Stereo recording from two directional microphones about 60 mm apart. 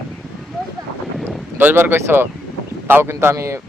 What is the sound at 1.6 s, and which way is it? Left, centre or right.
A man's voice, right.